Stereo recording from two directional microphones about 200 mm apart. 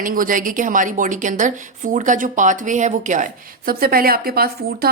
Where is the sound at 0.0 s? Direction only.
45° right (ahead or behind).